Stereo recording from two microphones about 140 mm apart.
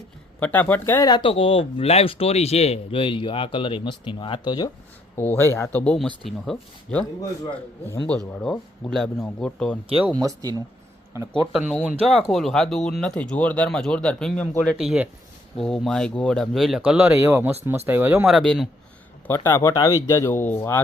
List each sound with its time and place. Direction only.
0.3 s speech: 10° left (ahead or behind)
1.1 s speech: 40° left (ahead or behind)
5.4 s speech: 20° left (ahead or behind); by 7.0 s centre (ahead or behind)
8.4 s speech: centre (ahead or behind)
10.2 s speech: 25° right (ahead or behind)
12.0 s speech: centre (ahead or behind)
14.8 s speech: 5° right (ahead or behind)
18.3 s speech: centre (ahead or behind)
19.3 s speech: 15° left (ahead or behind)